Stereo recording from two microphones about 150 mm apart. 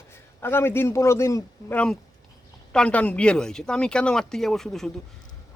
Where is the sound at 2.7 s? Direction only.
5° left (ahead or behind).